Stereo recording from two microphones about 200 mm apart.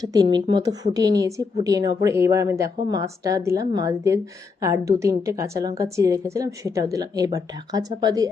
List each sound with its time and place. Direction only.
0.0 s a woman's voice: 20° right (ahead or behind)